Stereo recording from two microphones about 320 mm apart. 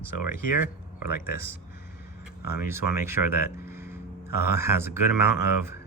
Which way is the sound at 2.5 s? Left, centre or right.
Centre.